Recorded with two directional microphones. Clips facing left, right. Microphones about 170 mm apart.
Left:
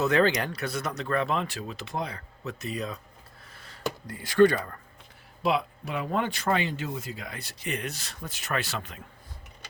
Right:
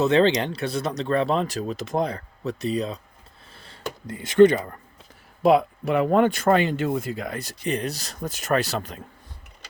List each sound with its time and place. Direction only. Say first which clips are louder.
0.0 s speech: right 5 dB; 25° right (ahead or behind)
3.5 s a sound: right 4 dB; 30° right (ahead or behind)
4.0 s speech: right 5 dB; 20° right (ahead or behind)
5.4 s speech: right 9 dB; 50° right (ahead or behind)